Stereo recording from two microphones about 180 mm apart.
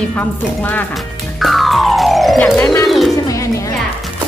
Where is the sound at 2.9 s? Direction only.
Centre (ahead or behind).